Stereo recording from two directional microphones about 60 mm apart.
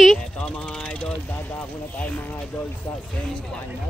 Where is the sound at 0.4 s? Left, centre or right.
Left.